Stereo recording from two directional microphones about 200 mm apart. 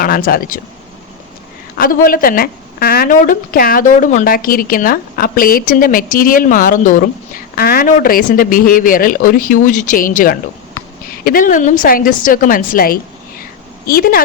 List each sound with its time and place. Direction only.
0.0 s a woman's voice: 45° left (ahead or behind)
1.8 s a woman's voice: 45° left (ahead or behind)